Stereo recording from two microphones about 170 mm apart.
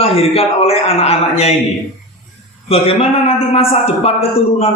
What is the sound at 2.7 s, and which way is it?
A man's voice, 35° left (ahead or behind).